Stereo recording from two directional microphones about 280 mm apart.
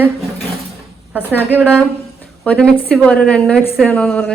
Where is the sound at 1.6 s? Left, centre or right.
Centre.